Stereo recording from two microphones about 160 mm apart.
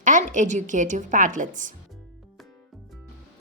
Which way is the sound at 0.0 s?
50° right (ahead or behind).